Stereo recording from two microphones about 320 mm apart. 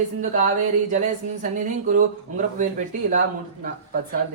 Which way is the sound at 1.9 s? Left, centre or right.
Right.